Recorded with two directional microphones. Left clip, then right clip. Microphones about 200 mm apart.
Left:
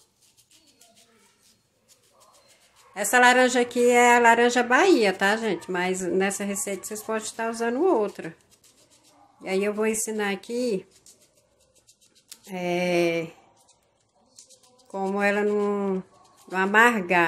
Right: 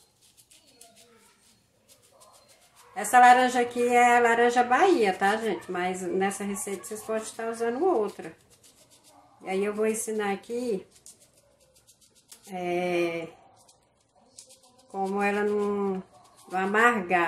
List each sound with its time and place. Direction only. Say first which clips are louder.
2.9 s a woman's voice: right 1 dB; 40° left (ahead or behind)
9.4 s a woman's voice: left 2 dB; 45° left (ahead or behind)
12.4 s a woman's voice: left 3 dB; 45° left (ahead or behind)
14.9 s a woman's voice: left 3 dB; 45° left (ahead or behind)